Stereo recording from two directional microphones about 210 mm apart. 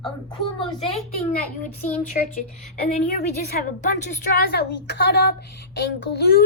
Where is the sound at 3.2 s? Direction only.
45° left (ahead or behind).